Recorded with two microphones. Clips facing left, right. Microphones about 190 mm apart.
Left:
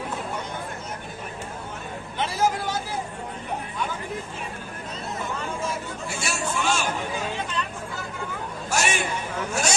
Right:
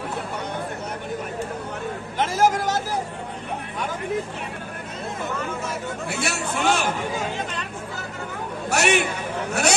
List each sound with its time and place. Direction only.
2.5 s speech: 45° right (ahead or behind)
6.1 s a man's voice: 60° right (ahead or behind)
8.7 s a man's voice: 65° right (ahead or behind)